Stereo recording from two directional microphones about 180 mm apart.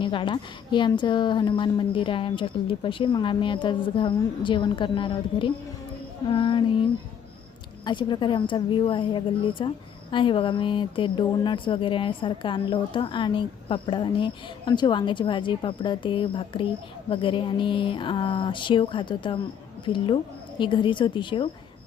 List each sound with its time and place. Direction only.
0.0 s speech: 25° left (ahead or behind)
7.9 s speech: 25° left (ahead or behind)